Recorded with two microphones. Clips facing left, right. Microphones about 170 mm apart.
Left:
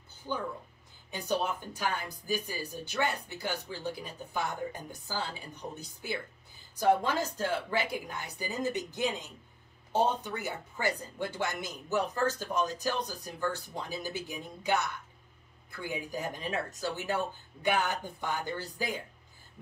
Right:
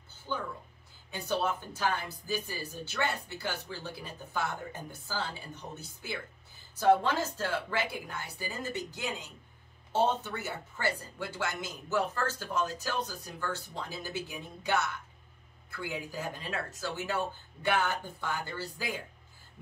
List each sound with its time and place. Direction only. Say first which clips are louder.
0.3 s speech: left 1 dB; 15° left (ahead or behind)
15.7 s speech: left 1 dB; 15° left (ahead or behind)